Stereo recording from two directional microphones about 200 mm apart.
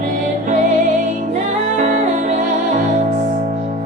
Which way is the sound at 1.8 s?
35° right (ahead or behind).